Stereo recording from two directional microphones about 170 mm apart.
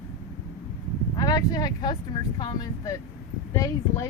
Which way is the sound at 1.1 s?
20° left (ahead or behind).